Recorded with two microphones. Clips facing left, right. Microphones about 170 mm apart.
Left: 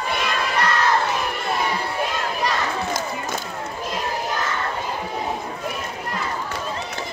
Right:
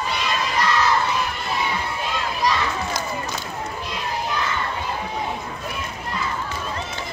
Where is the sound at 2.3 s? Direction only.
60° left (ahead or behind).